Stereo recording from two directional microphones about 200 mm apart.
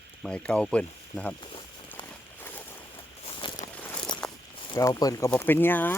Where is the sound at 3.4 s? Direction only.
25° left (ahead or behind).